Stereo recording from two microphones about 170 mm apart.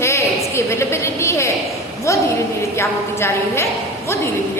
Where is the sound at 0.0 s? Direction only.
15° left (ahead or behind).